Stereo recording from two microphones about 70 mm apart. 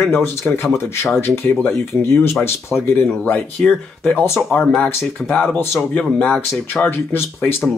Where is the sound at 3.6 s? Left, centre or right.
Centre.